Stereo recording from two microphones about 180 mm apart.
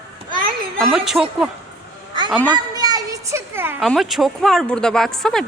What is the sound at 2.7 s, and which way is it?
Children playing, 20° right (ahead or behind).